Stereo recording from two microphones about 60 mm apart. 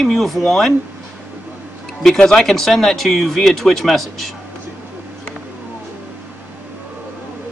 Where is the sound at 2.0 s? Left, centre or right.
Centre.